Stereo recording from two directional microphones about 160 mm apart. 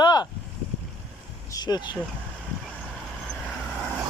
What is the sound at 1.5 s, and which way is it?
Speech, 25° left (ahead or behind).